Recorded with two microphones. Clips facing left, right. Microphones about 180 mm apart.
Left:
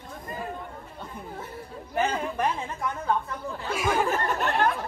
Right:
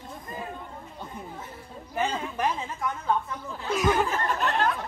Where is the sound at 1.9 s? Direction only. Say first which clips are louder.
Left 2 dB; centre (ahead or behind).